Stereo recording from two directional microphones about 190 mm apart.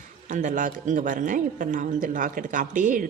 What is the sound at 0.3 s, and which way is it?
A woman's voice, 40° right (ahead or behind).